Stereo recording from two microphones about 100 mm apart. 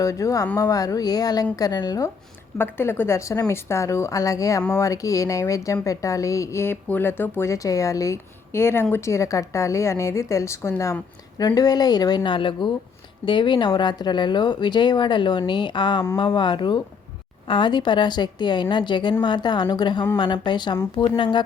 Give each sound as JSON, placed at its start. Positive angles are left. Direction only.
{"t": 0.0, "sound": "speech", "side_deg": 35}
{"t": 2.6, "sound": "speech", "side_deg": 20}
{"t": 7.5, "sound": "speech", "side_deg": 35}
{"t": 11.3, "sound": "speech", "side_deg": 40}